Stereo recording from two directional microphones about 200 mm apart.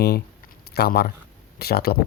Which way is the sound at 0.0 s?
50° left (ahead or behind).